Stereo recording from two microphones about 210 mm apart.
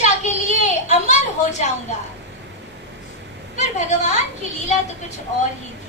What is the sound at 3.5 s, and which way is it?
Speech, 35° left (ahead or behind).